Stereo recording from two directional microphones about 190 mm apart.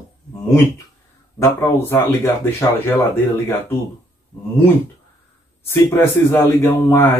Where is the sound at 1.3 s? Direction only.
15° left (ahead or behind).